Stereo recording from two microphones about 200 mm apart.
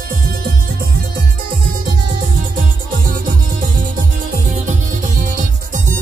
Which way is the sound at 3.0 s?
45° right (ahead or behind).